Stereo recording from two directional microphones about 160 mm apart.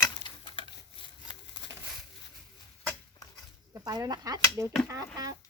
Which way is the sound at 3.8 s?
25° right (ahead or behind).